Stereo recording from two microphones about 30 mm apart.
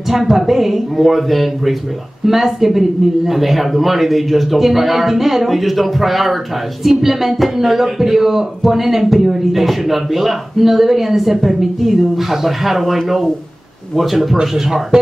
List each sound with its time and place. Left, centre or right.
0.1 s speech: centre
14.3 s speech: centre